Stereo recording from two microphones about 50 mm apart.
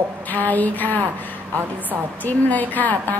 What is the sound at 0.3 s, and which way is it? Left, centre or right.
Speech, left.